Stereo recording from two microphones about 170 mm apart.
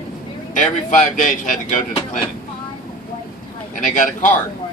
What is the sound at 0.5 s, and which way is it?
Speech, 50° left (ahead or behind).